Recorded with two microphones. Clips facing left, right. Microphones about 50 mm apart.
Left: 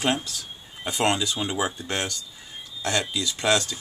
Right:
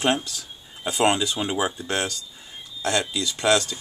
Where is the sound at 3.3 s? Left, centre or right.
Centre.